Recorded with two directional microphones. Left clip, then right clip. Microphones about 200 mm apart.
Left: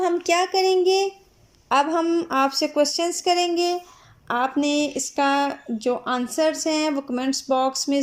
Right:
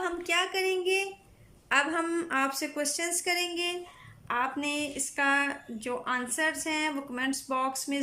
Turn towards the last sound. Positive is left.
turn(degrees=15)  # may be behind; listen again after turning